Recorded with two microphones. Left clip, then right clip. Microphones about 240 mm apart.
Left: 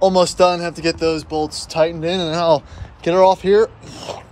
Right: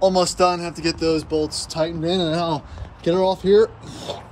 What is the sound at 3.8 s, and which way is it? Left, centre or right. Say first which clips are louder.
Speech: left 1 dB; left.